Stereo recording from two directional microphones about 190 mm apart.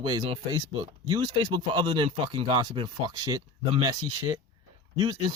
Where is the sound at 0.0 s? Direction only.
25° right (ahead or behind).